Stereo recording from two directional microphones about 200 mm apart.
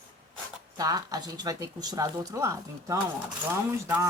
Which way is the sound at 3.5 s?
10° right (ahead or behind).